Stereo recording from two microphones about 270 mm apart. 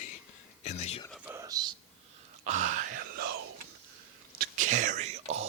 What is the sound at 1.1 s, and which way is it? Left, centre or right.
Speech, centre.